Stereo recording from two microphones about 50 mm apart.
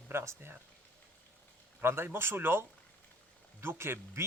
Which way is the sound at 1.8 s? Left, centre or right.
Right.